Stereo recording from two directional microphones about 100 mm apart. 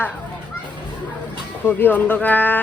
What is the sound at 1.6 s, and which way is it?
Speech, 20° left (ahead or behind).